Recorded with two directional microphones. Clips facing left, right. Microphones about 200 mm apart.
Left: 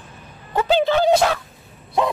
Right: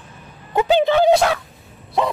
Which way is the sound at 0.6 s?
15° right (ahead or behind).